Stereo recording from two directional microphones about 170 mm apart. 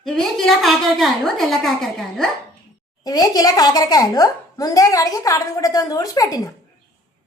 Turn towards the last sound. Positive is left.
turn(degrees=20)  # may be behind; listen again after turning